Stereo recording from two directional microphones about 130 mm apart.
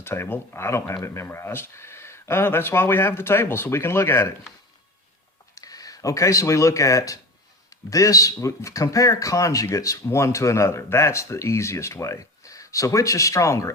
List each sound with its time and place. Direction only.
0.0 s speech: 20° left (ahead or behind)
5.5 s speech: 25° left (ahead or behind)